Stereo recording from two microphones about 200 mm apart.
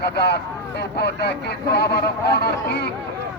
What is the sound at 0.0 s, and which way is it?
Speech, 55° left (ahead or behind).